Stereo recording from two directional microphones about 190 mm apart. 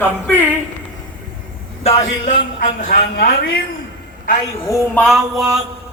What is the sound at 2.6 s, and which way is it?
A woman's voice, 50° left (ahead or behind).